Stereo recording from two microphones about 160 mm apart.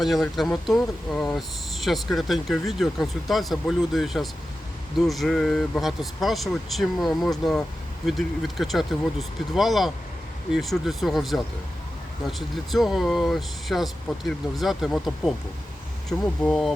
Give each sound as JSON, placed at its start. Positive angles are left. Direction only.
{"t": 0.0, "sound": "speech", "side_deg": 0}